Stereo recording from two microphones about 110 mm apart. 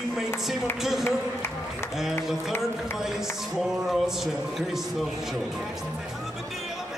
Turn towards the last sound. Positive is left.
turn(degrees=-5)  # may be behind; listen again after turning